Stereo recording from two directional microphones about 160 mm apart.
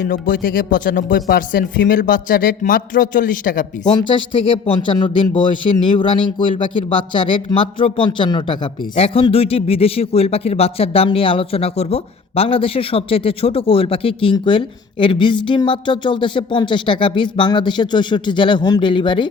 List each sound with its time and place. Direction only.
0.0 s speech: 65° left (ahead or behind)
4.1 s speech: 30° left (ahead or behind)